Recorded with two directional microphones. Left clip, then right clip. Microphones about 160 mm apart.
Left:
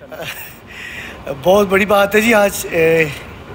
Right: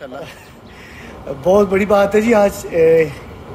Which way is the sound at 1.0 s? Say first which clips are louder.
Even; 10° right (ahead or behind).